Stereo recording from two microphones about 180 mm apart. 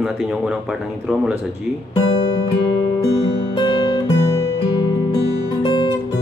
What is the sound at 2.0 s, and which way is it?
Speech, 20° left (ahead or behind).